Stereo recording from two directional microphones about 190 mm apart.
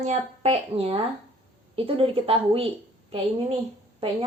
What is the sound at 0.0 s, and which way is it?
A woman's voice, 35° right (ahead or behind).